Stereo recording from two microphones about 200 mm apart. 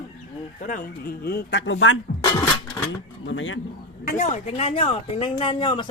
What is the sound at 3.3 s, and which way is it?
Speech, 70° left (ahead or behind).